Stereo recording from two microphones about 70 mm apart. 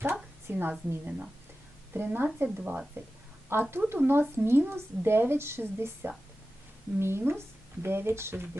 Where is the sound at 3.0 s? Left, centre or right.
Right.